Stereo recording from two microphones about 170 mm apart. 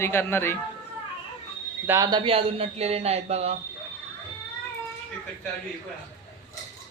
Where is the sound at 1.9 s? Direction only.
25° right (ahead or behind); by 3.6 s 40° right (ahead or behind).